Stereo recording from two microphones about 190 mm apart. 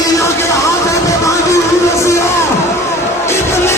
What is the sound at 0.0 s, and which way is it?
Music, 15° left (ahead or behind).